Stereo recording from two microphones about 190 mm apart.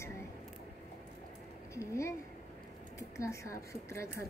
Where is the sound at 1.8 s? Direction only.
15° left (ahead or behind).